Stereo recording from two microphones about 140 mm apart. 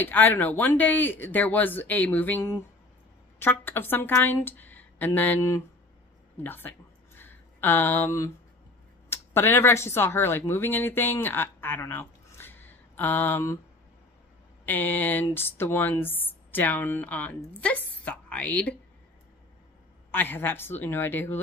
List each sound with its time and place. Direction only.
0.0 s speech: 15° left (ahead or behind)
7.2 s a sound: 15° left (ahead or behind)
9.1 s speech: 15° left (ahead or behind)
14.7 s a woman's voice: 15° left (ahead or behind)
20.1 s speech: 15° left (ahead or behind)